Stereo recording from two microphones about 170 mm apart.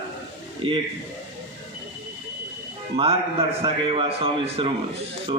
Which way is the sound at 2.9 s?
35° right (ahead or behind).